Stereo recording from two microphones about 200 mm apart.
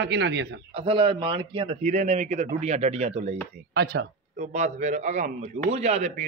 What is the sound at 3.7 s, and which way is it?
Speech, 50° right (ahead or behind).